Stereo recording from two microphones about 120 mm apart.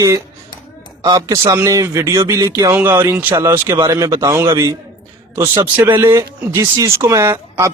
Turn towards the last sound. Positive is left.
turn(degrees=-25)  # may be behind; listen again after turning